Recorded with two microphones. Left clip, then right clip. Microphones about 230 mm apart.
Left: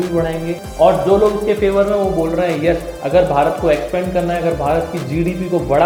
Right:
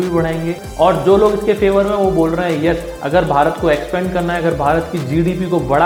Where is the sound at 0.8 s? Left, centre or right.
Right.